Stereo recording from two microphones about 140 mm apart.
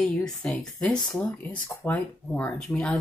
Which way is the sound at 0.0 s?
5° left (ahead or behind).